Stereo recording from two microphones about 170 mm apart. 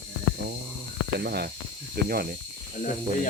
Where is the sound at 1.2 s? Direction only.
70° right (ahead or behind).